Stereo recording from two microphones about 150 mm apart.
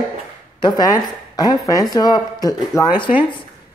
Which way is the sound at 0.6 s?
30° left (ahead or behind).